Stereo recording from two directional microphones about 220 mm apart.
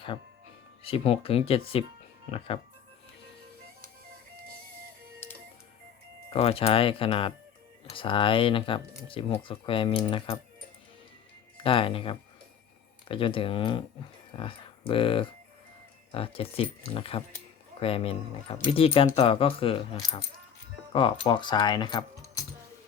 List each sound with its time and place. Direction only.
0.9 s speech: 25° left (ahead or behind)
5.2 s music: 10° left (ahead or behind)
6.3 s speech: 25° left (ahead or behind)
11.5 s speech: 25° left (ahead or behind)